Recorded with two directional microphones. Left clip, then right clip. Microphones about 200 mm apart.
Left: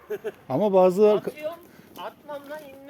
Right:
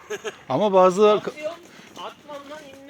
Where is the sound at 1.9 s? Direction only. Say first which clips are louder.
Even; 5° left (ahead or behind).